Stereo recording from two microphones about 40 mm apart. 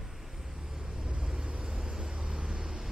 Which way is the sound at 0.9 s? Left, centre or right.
Right.